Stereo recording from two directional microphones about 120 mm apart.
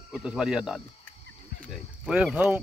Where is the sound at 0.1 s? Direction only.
5° right (ahead or behind).